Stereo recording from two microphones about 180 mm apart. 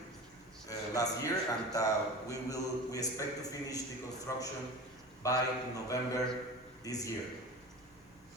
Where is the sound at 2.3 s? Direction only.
20° left (ahead or behind).